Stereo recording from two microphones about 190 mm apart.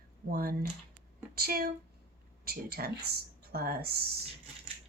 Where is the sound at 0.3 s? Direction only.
50° right (ahead or behind).